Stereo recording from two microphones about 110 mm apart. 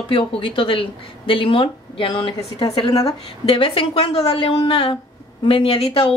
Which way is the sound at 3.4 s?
55° left (ahead or behind).